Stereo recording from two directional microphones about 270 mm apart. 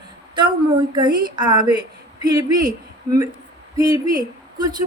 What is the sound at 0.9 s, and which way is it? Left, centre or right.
Speech, centre.